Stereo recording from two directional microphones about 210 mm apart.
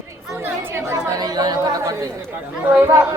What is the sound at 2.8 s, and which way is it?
Speech, 10° right (ahead or behind).